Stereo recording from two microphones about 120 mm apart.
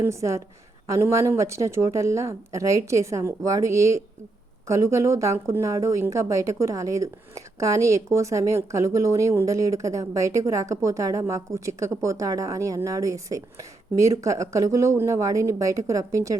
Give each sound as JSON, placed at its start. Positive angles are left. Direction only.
{"t": 0.0, "sound": "speech", "side_deg": -25}